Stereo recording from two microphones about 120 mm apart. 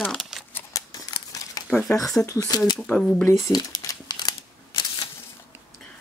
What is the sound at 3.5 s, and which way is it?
Crumpling, 30° left (ahead or behind).